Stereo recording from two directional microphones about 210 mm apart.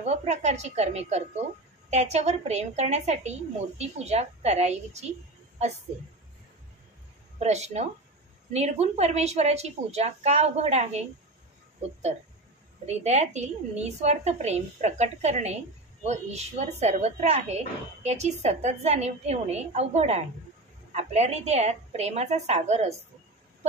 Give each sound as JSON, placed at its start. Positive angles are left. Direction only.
{"t": 0.0, "sound": "a woman's voice", "side_deg": -30}
{"t": 7.3, "sound": "a woman's voice", "side_deg": -30}